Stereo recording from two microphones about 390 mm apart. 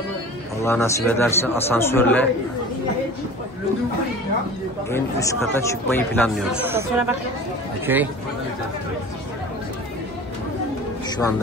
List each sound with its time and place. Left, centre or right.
0.7 s speech: centre
4.9 s speech: centre
11.1 s a sound: centre